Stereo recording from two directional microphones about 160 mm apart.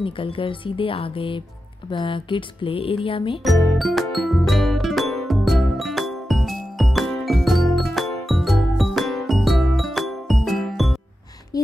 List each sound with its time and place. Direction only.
0.0 s speech: 35° left (ahead or behind)
3.7 s music: centre (ahead or behind)
11.5 s a sound: 25° left (ahead or behind)